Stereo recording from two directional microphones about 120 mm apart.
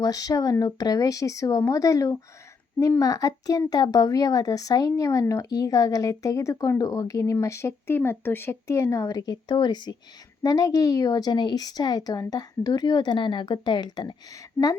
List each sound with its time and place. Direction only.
0.0 s a child's voice: 30° left (ahead or behind)